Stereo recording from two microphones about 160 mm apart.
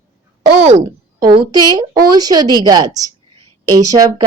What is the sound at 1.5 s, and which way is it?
A woman's voice, 25° right (ahead or behind).